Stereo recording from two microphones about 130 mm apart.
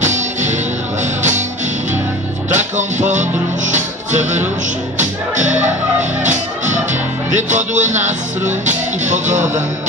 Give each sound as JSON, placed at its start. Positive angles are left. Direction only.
{"t": 0.0, "sound": "music", "side_deg": -70}
{"t": 2.5, "sound": "music", "side_deg": -70}